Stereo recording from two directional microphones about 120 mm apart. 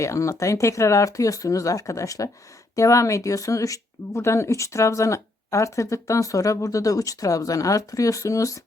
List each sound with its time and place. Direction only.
0.0 s speech: 25° left (ahead or behind)